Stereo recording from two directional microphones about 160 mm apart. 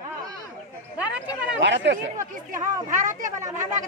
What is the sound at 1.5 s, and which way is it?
Speech, 90° right.